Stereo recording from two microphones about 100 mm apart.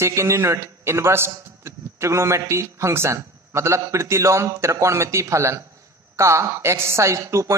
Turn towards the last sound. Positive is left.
turn(degrees=-30)  # may be behind; listen again after turning